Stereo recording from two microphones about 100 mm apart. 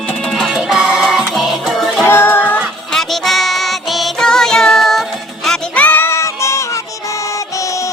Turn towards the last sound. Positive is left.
turn(degrees=30)  # may be behind; listen again after turning